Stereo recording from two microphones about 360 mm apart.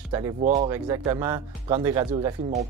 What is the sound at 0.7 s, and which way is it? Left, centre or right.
Speech, centre.